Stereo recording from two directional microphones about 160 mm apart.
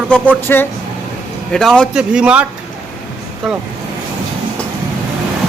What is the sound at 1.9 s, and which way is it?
Speech, 5° right (ahead or behind).